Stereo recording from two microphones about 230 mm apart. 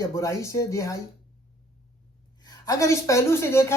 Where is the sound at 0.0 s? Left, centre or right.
Centre.